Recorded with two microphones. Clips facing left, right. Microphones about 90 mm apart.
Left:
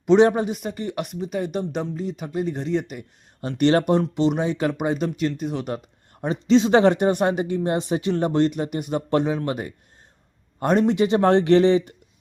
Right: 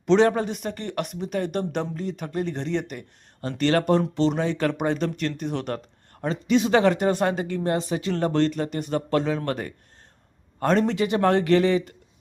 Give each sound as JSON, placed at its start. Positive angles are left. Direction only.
{"t": 0.0, "sound": "speech", "side_deg": 15}
{"t": 0.5, "sound": "speech", "side_deg": 5}
{"t": 3.6, "sound": "speech", "side_deg": 20}
{"t": 6.5, "sound": "speech", "side_deg": 25}